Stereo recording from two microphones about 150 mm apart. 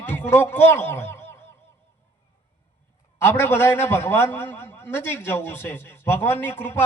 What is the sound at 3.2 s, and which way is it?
A man's voice, 15° left (ahead or behind).